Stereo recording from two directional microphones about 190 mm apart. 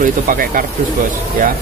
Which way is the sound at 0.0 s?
45° right (ahead or behind).